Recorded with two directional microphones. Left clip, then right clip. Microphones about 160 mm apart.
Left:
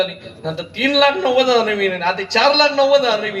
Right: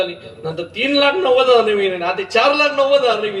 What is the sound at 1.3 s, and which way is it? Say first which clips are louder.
A man's voice: right 3 dB; 55° right (ahead or behind).